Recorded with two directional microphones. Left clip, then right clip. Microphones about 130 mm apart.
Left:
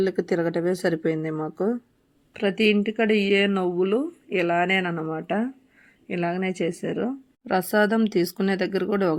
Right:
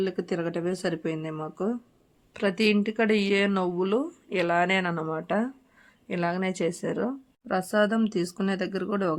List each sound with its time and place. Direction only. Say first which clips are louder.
0.0 s speech: left 5 dB; 30° left (ahead or behind)
2.3 s speech: left 3 dB; 15° left (ahead or behind)